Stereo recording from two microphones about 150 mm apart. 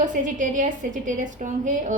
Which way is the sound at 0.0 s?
60° right (ahead or behind).